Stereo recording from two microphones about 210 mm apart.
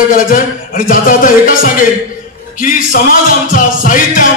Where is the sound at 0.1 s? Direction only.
40° left (ahead or behind).